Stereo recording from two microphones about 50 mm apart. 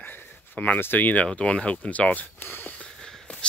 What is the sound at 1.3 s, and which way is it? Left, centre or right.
Speech, left.